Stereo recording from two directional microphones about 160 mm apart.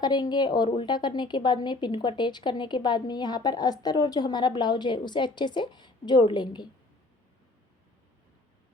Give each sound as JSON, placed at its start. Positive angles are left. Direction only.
{"t": 0.0, "sound": "speech", "side_deg": 25}